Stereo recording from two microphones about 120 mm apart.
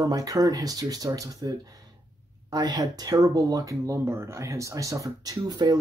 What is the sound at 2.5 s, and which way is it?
Speech, 30° right (ahead or behind).